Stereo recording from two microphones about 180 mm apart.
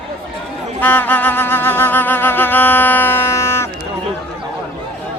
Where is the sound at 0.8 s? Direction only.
10° left (ahead or behind).